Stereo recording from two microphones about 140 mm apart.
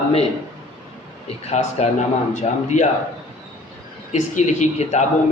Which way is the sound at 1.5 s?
50° left (ahead or behind).